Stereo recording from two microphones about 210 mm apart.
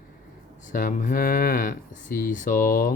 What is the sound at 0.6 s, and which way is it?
Speech, 40° left (ahead or behind).